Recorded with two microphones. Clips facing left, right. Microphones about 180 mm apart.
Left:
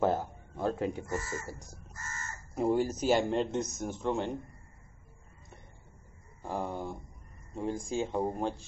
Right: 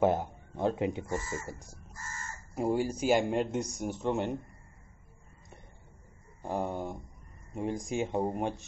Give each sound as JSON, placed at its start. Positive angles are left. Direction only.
{"t": 0.0, "sound": "speech", "side_deg": -15}
{"t": 2.5, "sound": "speech", "side_deg": -5}
{"t": 6.4, "sound": "speech", "side_deg": -20}